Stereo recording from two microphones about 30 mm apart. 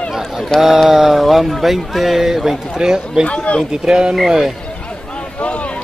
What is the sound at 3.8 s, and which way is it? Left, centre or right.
Speech, right.